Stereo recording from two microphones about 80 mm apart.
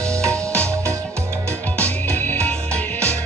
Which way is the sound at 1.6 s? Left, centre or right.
Centre.